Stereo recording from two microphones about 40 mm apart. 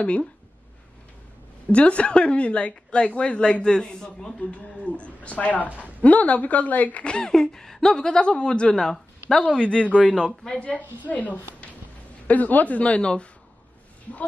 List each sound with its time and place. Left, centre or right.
1.7 s a woman's voice: left; by 4.3 s centre
4.4 s speech: left
5.7 s a woman's voice: right
6.0 s speech: left
7.2 s speech: centre
8.2 s a woman's voice: left
8.7 s speech: centre
9.4 s a woman's voice: left; by 10.6 s centre
11.1 s speech: left